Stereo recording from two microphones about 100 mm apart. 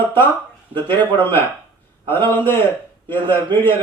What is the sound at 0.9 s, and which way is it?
A man's voice, 20° left (ahead or behind).